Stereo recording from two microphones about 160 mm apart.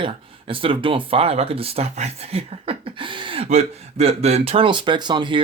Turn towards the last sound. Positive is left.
turn(degrees=-30)  # may be behind; listen again after turning